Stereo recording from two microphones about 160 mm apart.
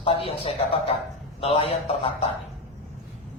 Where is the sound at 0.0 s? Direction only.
35° left (ahead or behind).